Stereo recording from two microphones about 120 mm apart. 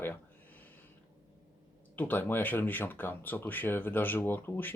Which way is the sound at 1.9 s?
15° left (ahead or behind).